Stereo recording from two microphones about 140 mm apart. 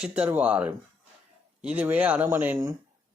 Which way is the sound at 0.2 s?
10° right (ahead or behind).